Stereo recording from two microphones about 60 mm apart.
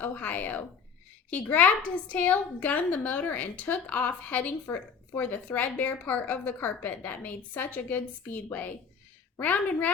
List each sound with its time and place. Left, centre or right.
0.0 s a woman's voice: left
9.4 s a woman's voice: left